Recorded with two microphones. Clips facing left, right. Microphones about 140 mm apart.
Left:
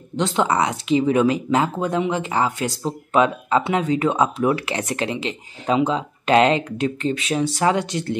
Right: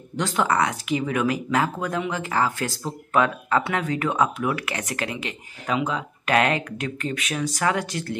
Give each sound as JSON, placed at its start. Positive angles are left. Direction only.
{"t": 0.1, "sound": "speech", "side_deg": 20}